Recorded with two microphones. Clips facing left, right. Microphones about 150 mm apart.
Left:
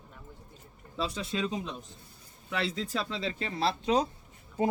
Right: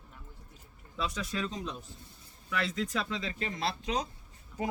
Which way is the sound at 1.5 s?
Centre (ahead or behind).